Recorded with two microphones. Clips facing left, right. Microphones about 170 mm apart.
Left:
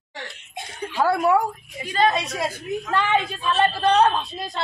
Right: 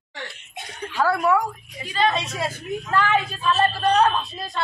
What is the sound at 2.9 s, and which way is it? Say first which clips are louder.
A woman's voice: right 1 dB; 25° left (ahead or behind).